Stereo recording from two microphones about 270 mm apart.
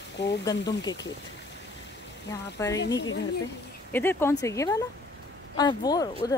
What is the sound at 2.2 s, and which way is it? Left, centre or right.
Speech, centre.